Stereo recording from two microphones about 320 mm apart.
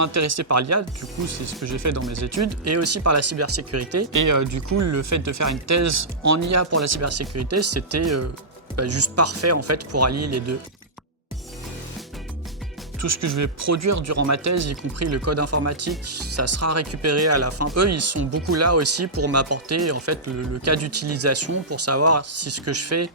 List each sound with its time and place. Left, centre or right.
0.0 s speech: right
13.0 s speech: right